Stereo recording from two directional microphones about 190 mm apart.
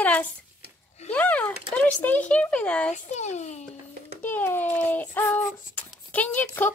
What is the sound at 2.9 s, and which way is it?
Speech, 35° left (ahead or behind).